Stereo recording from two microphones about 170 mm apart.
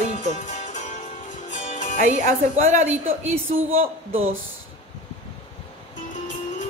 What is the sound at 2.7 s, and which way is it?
Speech, 45° right (ahead or behind).